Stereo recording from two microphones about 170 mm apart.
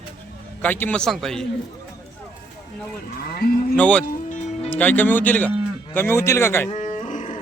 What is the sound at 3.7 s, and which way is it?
Speech, 10° left (ahead or behind).